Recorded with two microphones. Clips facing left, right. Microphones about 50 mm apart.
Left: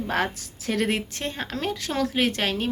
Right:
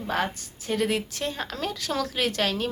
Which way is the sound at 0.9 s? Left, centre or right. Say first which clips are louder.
Even; left.